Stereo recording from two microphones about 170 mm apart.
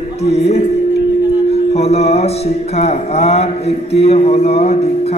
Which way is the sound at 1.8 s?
40° left (ahead or behind).